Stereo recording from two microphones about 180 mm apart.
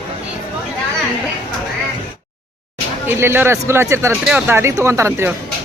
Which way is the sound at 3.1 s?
10° right (ahead or behind).